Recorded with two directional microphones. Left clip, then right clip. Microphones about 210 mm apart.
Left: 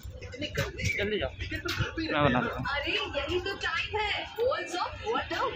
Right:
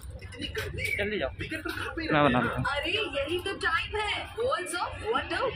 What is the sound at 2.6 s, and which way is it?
Speech, 35° right (ahead or behind).